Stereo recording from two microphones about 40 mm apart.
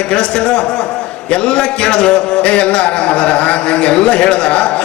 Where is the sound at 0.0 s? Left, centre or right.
Left.